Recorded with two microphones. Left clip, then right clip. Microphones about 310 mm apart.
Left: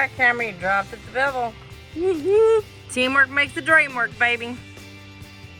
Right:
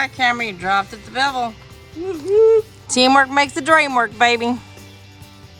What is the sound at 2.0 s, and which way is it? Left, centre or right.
Speech, left.